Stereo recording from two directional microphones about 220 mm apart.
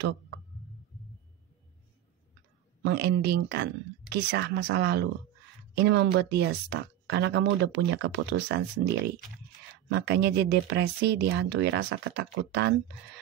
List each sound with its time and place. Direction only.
2.8 s speech: 50° right (ahead or behind)